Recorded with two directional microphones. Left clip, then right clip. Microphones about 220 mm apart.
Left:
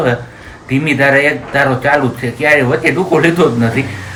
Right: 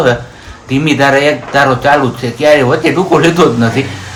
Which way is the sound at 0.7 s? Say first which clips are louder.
Right 2 dB; 20° right (ahead or behind).